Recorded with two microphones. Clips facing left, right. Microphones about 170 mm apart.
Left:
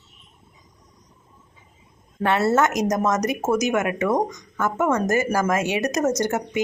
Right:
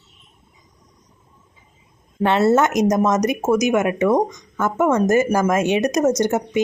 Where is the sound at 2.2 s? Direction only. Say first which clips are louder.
Right 4 dB; 20° right (ahead or behind).